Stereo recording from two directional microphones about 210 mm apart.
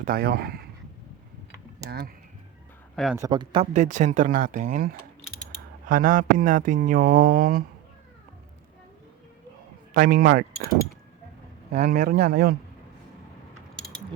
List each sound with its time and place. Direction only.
0.0 s speech: 45° right (ahead or behind)
1.9 s speech: 50° right (ahead or behind)
2.9 s speech: centre (ahead or behind)
3.2 s speech: 20° right (ahead or behind)
3.7 s a sound: 35° right (ahead or behind)
9.9 s speech: 45° right (ahead or behind)